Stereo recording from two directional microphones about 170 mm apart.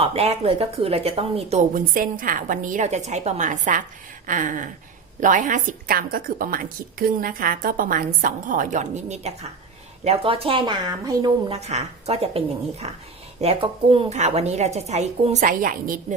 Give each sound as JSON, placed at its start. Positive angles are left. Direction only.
{"t": 0.0, "sound": "speech", "side_deg": -35}
{"t": 1.7, "sound": "a woman's voice", "side_deg": -55}
{"t": 11.5, "sound": "speech", "side_deg": -40}